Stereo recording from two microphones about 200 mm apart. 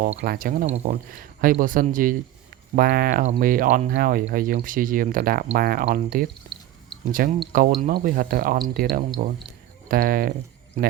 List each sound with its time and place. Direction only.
0.2 s speech: 45° right (ahead or behind)